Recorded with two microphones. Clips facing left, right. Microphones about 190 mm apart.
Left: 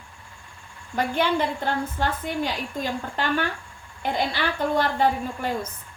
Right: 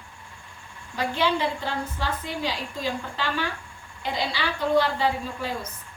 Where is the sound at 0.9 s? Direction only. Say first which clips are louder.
Left 2 dB; 55° left (ahead or behind).